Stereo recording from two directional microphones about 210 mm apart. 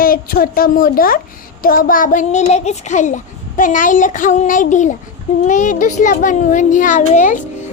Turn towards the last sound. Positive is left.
turn(degrees=35)  # may be behind; listen again after turning